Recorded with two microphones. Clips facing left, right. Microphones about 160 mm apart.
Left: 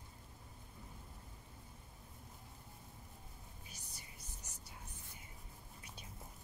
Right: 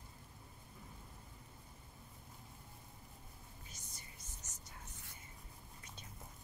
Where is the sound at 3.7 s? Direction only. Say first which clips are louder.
Even; 10° left (ahead or behind).